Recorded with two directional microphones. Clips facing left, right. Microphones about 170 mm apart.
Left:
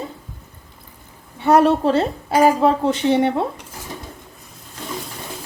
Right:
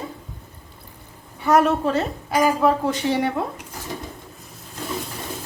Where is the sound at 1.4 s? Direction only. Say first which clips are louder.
Left 3 dB; 30° left (ahead or behind).